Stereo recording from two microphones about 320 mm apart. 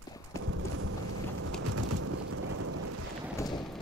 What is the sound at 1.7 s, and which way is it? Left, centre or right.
Bird, right.